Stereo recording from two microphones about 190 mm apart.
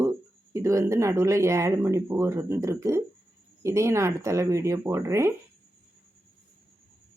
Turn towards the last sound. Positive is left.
turn(degrees=-15)  # may be behind; listen again after turning